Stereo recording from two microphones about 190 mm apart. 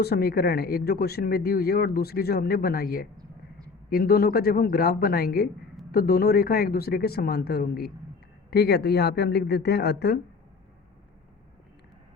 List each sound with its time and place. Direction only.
0.0 s speech: 55° left (ahead or behind)